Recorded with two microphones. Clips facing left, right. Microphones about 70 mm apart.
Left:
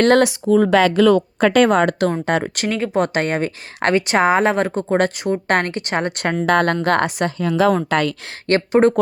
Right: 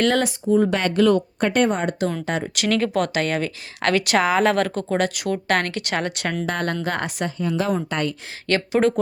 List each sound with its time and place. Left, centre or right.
0.0 s a woman's voice: left
2.2 s speech: left
2.6 s speech: centre
2.9 s speech: left
6.1 s speech: left
6.5 s a woman's voice: left
8.4 s speech: left